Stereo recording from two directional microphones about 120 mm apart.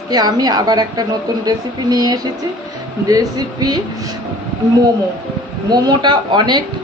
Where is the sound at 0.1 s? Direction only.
35° right (ahead or behind).